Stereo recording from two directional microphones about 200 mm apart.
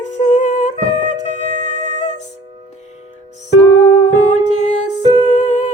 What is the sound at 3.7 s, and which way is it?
Music, 90° left.